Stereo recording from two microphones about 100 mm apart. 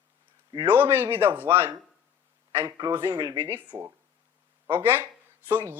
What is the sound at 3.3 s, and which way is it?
Speech, 25° right (ahead or behind).